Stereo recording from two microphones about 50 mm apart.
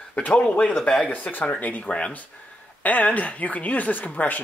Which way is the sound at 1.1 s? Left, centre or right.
Left.